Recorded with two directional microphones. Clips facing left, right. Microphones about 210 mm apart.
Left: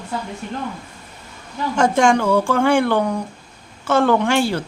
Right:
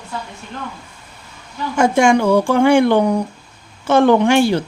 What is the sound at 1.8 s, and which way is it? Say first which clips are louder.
Speech: right 3 dB; 10° right (ahead or behind).